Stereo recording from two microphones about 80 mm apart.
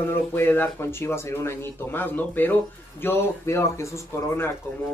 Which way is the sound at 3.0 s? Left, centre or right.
Left.